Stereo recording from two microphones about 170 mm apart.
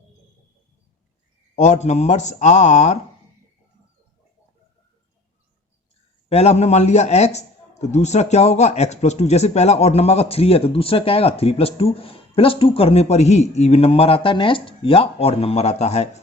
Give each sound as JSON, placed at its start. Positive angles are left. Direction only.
{"t": 1.5, "sound": "speech", "side_deg": 45}
{"t": 6.2, "sound": "a man's voice", "side_deg": 35}